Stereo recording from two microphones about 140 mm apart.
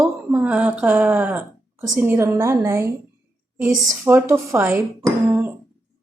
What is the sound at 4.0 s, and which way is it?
Speech, 20° right (ahead or behind).